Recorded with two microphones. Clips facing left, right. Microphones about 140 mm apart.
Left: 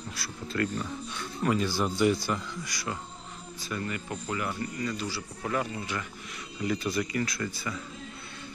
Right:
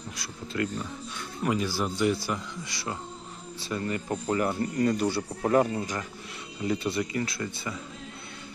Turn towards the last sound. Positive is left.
turn(degrees=-25)  # may be behind; listen again after turning